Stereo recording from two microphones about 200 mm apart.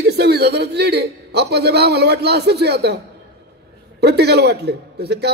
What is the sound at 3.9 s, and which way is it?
A man's voice, 55° right (ahead or behind).